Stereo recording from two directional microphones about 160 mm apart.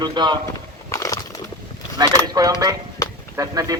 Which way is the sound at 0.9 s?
20° left (ahead or behind).